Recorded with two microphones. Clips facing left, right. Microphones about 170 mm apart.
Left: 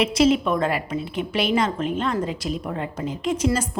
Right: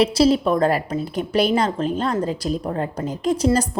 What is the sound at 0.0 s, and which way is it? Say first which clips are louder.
Speech: right 2 dB; 35° right (ahead or behind).